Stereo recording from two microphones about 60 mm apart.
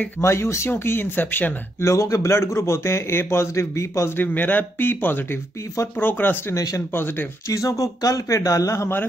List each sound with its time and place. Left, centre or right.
0.2 s a man's voice: left
0.7 s speech: left
1.8 s speech: left
2.3 s a man's voice: left
4.1 s speech: left
6.5 s speech: left
6.9 s speech: left
7.4 s speech: left